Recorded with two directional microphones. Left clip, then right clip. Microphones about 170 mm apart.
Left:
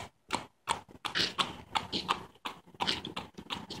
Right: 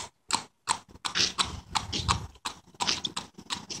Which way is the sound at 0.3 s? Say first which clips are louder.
Right 4 dB; 15° right (ahead or behind).